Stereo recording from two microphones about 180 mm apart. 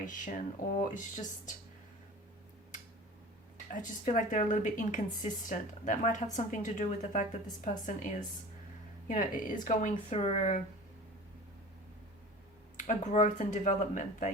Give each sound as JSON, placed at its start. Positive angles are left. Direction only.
{"t": 0.0, "sound": "speech", "side_deg": 45}
{"t": 3.7, "sound": "speech", "side_deg": 45}
{"t": 12.7, "sound": "speech", "side_deg": 45}